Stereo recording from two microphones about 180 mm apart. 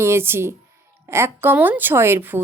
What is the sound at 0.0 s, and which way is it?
Speech, 15° right (ahead or behind).